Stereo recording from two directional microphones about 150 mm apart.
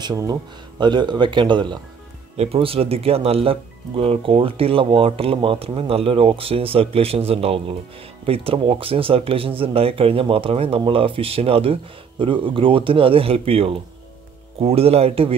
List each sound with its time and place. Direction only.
0.0 s speech: 25° right (ahead or behind)
2.3 s speech: 40° right (ahead or behind)